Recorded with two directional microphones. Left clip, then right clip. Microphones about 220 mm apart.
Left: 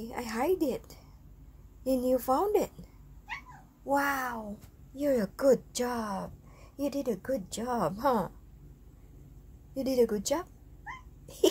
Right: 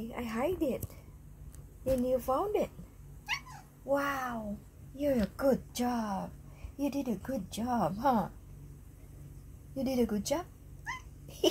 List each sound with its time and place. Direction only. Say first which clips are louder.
0.1 s a woman's voice: left 4 dB; 10° left (ahead or behind)
2.0 s a woman's voice: left 7 dB; 15° left (ahead or behind)
3.9 s a woman's voice: left 3 dB; 10° left (ahead or behind)
9.8 s a woman's voice: left 5 dB; 15° left (ahead or behind)